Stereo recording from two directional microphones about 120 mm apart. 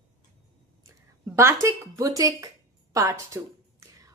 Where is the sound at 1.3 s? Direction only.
25° right (ahead or behind).